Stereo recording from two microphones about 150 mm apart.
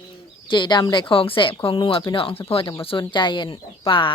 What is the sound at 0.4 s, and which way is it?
A woman's voice, 30° left (ahead or behind).